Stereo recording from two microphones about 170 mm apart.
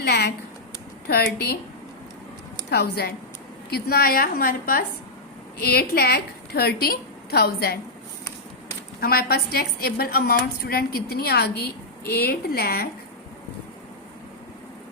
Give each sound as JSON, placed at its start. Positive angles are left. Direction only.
{"t": 0.0, "sound": "a sound", "side_deg": 75}
{"t": 1.0, "sound": "a woman's voice", "side_deg": 70}
{"t": 2.6, "sound": "a woman's voice", "side_deg": 70}
{"t": 9.0, "sound": "a woman's voice", "side_deg": 65}